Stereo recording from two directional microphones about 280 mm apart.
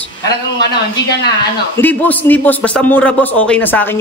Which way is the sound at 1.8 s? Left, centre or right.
Centre.